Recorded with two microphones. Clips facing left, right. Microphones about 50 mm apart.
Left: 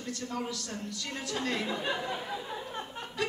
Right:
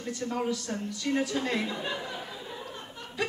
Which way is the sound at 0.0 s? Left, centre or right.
Right.